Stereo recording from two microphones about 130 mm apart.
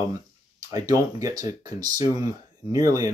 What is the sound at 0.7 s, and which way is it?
Speech, 25° right (ahead or behind).